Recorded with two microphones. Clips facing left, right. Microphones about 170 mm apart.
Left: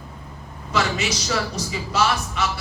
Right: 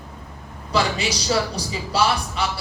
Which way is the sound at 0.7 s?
35° right (ahead or behind).